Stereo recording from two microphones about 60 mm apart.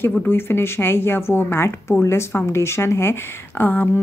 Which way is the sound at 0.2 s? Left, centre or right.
Left.